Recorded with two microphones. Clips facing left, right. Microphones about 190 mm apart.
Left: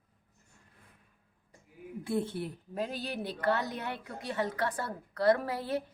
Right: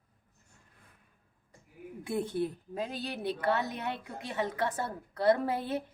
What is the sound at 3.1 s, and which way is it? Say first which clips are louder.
A woman's voice: right 1 dB; 20° right (ahead or behind).